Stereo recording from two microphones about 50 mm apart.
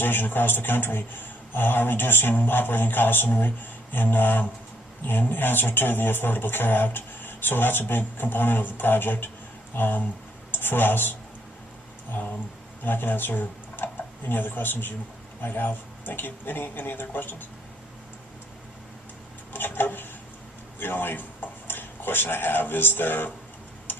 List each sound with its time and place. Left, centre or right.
0.0 s speech: left
12.2 s speech: left
19.5 s a sound: left
20.7 s a man's voice: left